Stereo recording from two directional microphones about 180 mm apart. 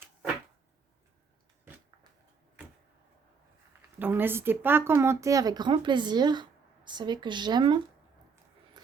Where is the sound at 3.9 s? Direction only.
10° right (ahead or behind).